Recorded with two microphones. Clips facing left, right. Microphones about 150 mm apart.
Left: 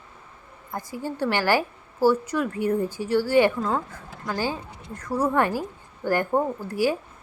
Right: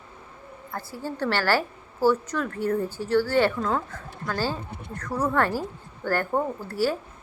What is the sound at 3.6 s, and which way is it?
A woman's voice, 5° left (ahead or behind).